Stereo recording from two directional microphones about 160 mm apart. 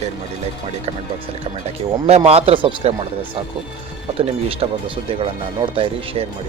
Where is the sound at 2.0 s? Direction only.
40° right (ahead or behind).